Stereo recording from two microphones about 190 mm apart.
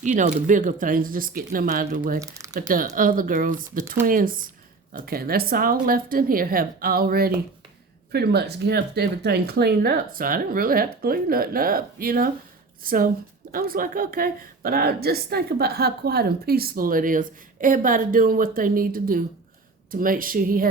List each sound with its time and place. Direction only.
0.0 s a woman's voice: 40° right (ahead or behind)
2.1 s speech: 15° right (ahead or behind)
2.5 s a woman's voice: 45° right (ahead or behind)